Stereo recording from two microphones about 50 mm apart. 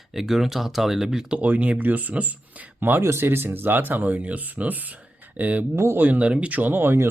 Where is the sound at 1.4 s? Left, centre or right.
Right.